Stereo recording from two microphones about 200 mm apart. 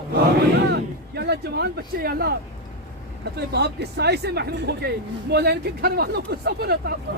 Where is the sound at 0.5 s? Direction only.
55° right (ahead or behind).